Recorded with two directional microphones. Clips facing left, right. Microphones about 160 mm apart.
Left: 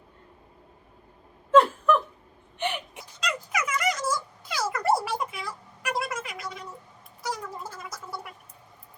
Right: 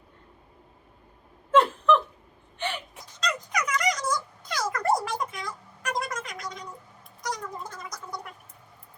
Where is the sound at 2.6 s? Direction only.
20° left (ahead or behind).